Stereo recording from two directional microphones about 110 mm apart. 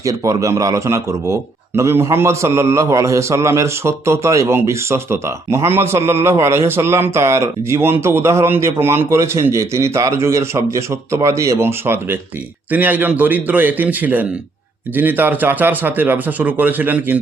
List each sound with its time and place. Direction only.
0.0 s a man's voice: 30° right (ahead or behind)